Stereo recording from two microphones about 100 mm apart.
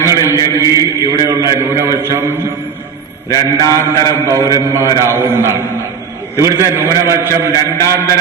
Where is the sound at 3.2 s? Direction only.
35° left (ahead or behind).